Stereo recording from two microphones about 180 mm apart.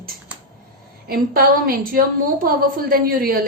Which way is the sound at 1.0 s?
55° right (ahead or behind).